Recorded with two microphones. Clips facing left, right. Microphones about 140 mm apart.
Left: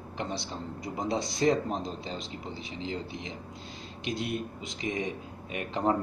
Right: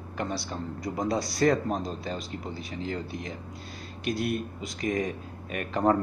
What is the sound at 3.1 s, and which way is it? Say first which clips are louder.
Speech: right 3 dB; 45° right (ahead or behind).